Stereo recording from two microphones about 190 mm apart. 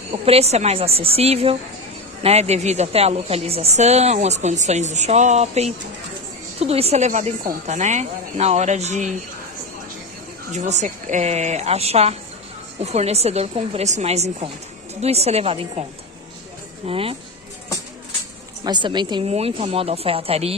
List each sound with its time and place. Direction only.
0.1 s a woman's voice: 30° right (ahead or behind)
10.5 s a woman's voice: 35° right (ahead or behind)
16.8 s a woman's voice: 30° right (ahead or behind)
18.6 s a woman's voice: 25° right (ahead or behind)